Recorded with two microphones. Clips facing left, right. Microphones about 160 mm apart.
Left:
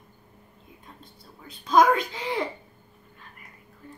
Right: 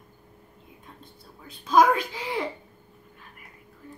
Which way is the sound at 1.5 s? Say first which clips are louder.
Even; 5° right (ahead or behind).